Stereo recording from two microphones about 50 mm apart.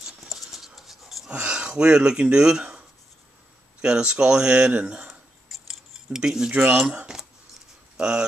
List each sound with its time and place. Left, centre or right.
0.0 s a sound: centre
1.3 s speech: right
3.8 s a man's voice: centre
5.5 s cutlery: centre
6.5 s a man's voice: right
7.1 s cutlery: centre
8.0 s speech: centre